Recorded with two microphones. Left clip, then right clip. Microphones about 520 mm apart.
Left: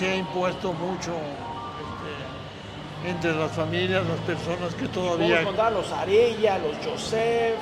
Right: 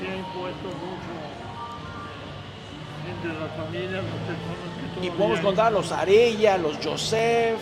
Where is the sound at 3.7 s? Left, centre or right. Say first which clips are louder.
Left 7 dB; left.